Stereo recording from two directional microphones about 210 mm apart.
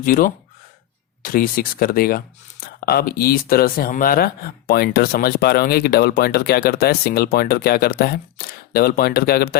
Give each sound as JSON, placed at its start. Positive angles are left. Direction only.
{"t": 0.0, "sound": "speech", "side_deg": 40}